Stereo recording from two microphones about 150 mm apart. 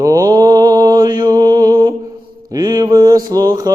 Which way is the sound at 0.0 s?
25° right (ahead or behind).